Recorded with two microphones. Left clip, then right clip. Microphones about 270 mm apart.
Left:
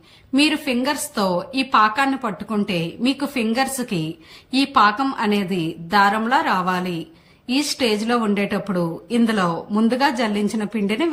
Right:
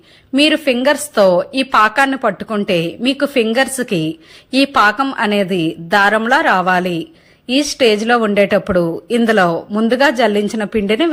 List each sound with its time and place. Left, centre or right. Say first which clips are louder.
0.3 s a woman's voice: right 6 dB; centre